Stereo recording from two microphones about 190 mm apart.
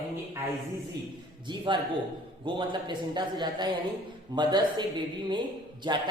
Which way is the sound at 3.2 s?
25° right (ahead or behind).